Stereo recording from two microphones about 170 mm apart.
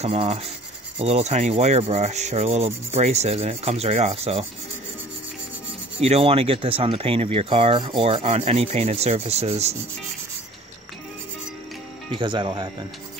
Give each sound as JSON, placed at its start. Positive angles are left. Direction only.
{"t": 0.0, "sound": "speech", "side_deg": -35}
{"t": 5.9, "sound": "speech", "side_deg": -35}
{"t": 12.2, "sound": "speech", "side_deg": -30}